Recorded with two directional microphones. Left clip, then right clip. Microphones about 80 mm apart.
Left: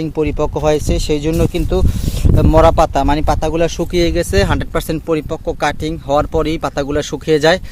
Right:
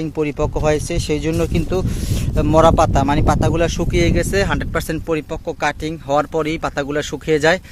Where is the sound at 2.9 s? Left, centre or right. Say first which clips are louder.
Left 2 dB; left.